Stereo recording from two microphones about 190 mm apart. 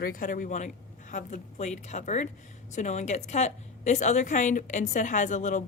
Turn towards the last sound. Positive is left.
turn(degrees=40)  # may be behind; listen again after turning